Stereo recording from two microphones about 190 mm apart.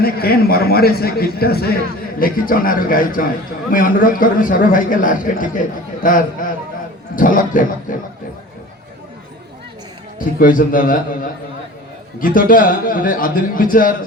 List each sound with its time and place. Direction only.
0.0 s a man's voice: 55° left (ahead or behind)
10.2 s a man's voice: 45° left (ahead or behind)